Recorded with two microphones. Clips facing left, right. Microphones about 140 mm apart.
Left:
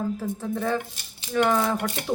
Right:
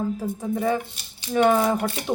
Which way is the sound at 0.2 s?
15° right (ahead or behind).